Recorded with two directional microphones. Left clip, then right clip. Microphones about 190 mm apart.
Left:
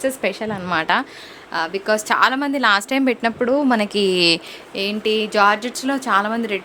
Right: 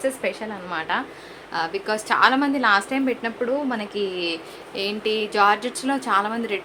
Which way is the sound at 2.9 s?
70° left (ahead or behind).